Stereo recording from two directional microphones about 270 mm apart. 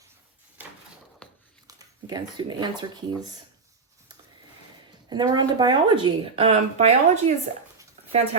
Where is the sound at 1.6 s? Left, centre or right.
Centre.